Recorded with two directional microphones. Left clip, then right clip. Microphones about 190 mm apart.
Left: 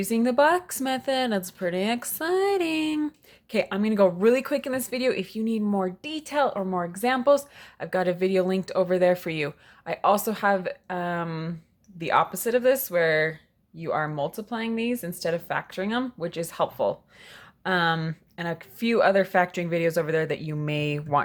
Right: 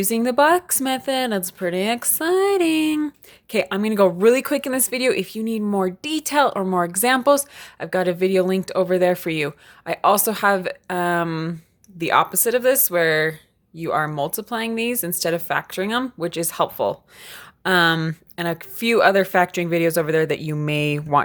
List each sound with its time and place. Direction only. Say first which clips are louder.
0.0 s speech: right 4 dB; 20° right (ahead or behind)